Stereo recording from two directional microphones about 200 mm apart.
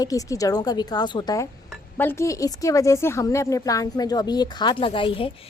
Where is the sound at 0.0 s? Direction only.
15° left (ahead or behind).